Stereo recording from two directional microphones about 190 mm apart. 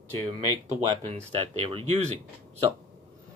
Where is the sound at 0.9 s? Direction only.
35° right (ahead or behind).